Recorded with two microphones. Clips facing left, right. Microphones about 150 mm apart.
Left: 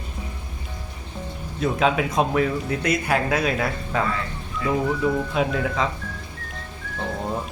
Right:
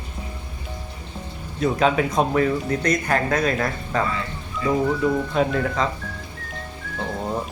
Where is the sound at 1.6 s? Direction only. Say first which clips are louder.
Right 2 dB; centre (ahead or behind).